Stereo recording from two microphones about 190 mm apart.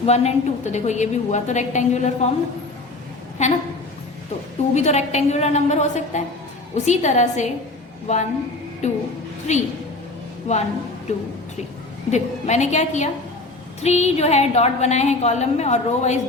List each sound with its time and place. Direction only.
0.0 s a woman's voice: 35° left (ahead or behind)
3.4 s a woman's voice: 35° left (ahead or behind)
4.7 s a woman's voice: 35° left (ahead or behind)
12.1 s a woman's voice: 35° left (ahead or behind)